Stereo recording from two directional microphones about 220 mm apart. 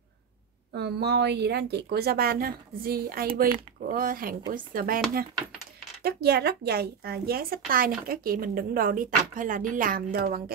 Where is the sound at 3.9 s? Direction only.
40° right (ahead or behind).